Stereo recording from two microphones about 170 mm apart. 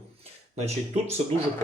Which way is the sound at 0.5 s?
40° right (ahead or behind).